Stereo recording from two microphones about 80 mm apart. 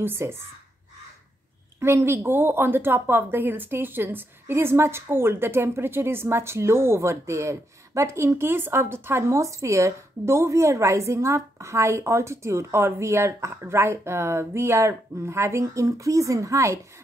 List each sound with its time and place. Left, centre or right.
0.0 s a woman's voice: right
1.8 s a woman's voice: right